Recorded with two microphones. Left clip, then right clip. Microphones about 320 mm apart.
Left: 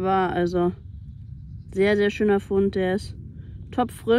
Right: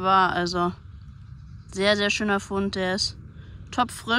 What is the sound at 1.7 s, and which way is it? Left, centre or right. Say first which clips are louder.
Speech: left 1 dB; centre.